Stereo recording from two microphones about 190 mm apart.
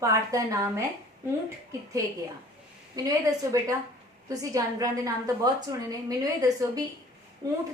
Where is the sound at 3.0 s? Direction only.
20° right (ahead or behind).